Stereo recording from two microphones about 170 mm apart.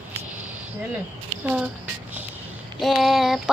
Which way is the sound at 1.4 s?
5° right (ahead or behind).